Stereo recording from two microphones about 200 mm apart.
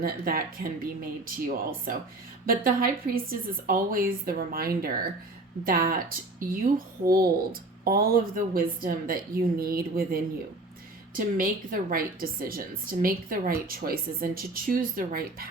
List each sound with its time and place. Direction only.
0.0 s a woman's voice: 45° right (ahead or behind)